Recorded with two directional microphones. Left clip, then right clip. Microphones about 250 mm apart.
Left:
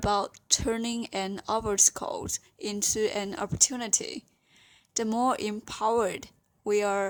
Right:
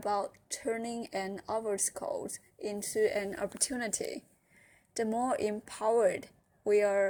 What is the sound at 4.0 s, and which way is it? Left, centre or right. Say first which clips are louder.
Speech: left 1 dB; left.